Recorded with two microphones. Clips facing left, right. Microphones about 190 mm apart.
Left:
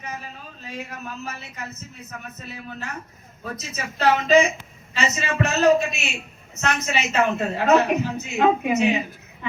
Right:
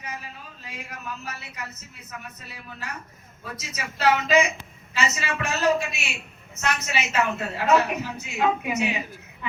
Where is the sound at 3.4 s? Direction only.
45° left (ahead or behind).